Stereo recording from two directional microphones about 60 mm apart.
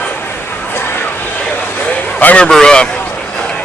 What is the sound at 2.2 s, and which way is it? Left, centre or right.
Speech, left.